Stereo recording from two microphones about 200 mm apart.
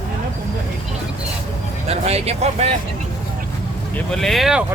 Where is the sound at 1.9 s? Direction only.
30° right (ahead or behind).